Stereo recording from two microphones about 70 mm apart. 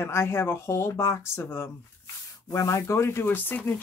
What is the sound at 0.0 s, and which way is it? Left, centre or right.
Speech, left.